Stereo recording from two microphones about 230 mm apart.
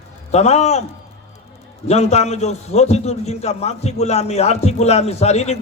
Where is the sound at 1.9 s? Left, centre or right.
Left.